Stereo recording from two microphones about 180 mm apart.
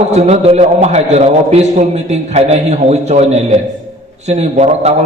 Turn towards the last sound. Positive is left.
turn(degrees=-35)  # may be behind; listen again after turning